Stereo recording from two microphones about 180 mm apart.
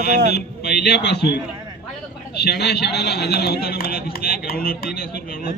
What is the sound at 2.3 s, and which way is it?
Speech, 65° left (ahead or behind).